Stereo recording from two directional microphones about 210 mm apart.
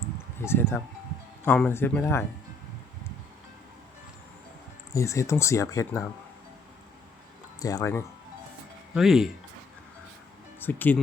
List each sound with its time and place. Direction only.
0.4 s speech: 10° left (ahead or behind)
4.9 s speech: 15° left (ahead or behind)
7.6 s speech: 15° left (ahead or behind)
9.0 s speech: centre (ahead or behind)
10.6 s speech: 10° left (ahead or behind)